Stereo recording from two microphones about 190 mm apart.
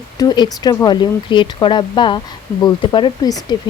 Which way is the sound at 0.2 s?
20° left (ahead or behind).